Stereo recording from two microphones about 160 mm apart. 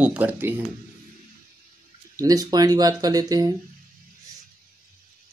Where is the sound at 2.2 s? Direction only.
25° right (ahead or behind).